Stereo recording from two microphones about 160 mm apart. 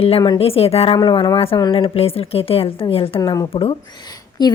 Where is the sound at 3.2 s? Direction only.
25° left (ahead or behind).